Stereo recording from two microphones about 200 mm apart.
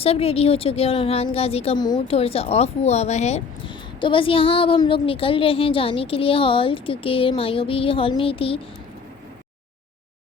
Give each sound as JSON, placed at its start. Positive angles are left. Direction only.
{"t": 0.0, "sound": "a woman's voice", "side_deg": 30}